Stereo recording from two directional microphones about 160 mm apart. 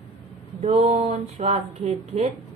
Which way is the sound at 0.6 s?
40° right (ahead or behind).